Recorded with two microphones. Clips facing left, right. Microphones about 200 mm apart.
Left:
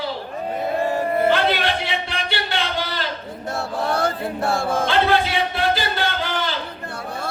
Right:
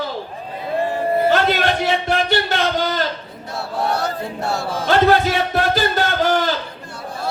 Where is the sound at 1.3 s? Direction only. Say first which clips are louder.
Right 2 dB; 45° right (ahead or behind).